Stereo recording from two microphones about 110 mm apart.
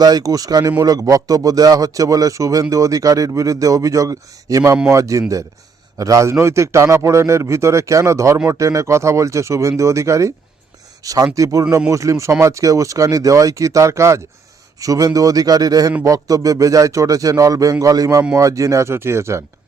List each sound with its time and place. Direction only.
0.0 s a man's voice: 35° right (ahead or behind)